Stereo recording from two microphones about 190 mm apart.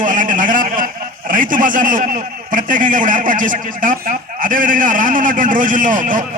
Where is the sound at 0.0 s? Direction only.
45° right (ahead or behind).